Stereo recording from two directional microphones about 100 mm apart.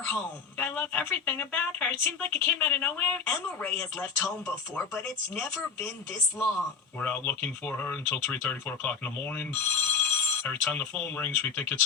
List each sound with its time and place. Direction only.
0.6 s speech: 15° left (ahead or behind)
7.0 s speech: 20° left (ahead or behind)